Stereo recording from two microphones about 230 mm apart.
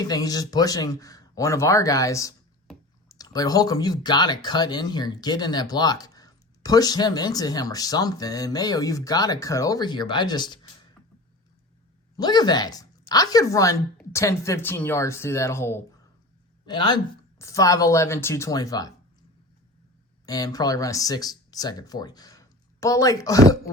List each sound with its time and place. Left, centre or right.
0.0 s speech: centre
12.1 s speech: centre
20.2 s speech: centre